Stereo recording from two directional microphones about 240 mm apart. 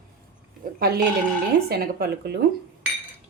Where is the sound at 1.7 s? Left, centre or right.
Right.